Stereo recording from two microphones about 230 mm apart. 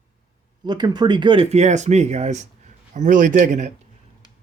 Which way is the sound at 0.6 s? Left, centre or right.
Centre.